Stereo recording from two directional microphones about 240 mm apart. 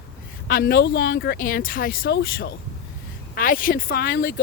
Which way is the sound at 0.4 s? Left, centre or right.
Left.